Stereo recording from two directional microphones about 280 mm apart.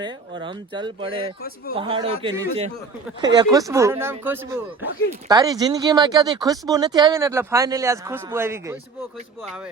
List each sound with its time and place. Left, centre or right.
0.0 s speech: centre